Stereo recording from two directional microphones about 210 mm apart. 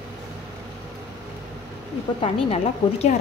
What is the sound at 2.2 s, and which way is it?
Speech, 30° left (ahead or behind).